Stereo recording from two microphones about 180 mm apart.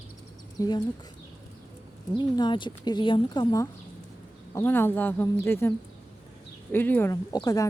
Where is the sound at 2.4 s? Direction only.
25° left (ahead or behind).